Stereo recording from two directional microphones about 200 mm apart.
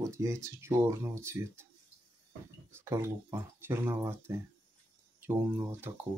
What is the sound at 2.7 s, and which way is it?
Speech, 15° right (ahead or behind).